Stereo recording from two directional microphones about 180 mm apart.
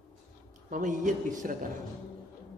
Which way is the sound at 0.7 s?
45° right (ahead or behind).